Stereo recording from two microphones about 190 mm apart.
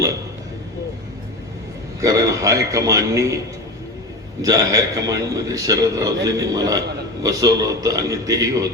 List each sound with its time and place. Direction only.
2.0 s a man's voice: 15° right (ahead or behind)
4.4 s a man's voice: 20° right (ahead or behind)